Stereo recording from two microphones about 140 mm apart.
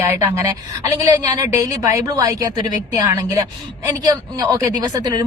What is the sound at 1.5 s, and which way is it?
Speech, 20° right (ahead or behind).